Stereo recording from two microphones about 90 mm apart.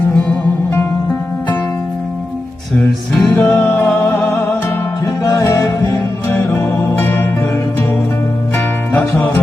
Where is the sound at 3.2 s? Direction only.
20° left (ahead or behind).